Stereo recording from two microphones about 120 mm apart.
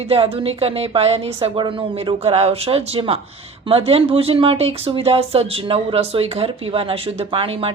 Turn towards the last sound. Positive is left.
turn(degrees=-50)  # may be behind; listen again after turning